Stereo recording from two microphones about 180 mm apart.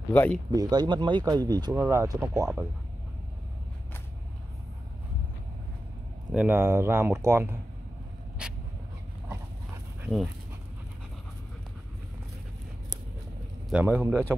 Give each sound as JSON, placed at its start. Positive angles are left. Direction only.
{"t": 0.1, "sound": "speech", "side_deg": 10}
{"t": 0.5, "sound": "speech", "side_deg": -20}
{"t": 6.3, "sound": "speech", "side_deg": -10}
{"t": 8.4, "sound": "dog", "side_deg": -5}
{"t": 13.7, "sound": "speech", "side_deg": -10}